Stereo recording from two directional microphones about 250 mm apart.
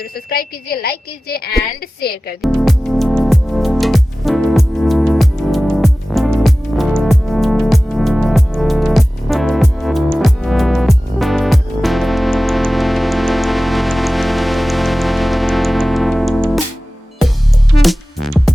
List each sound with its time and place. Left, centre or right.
0.0 s a woman's voice: left
2.4 s music: centre
17.8 s music: centre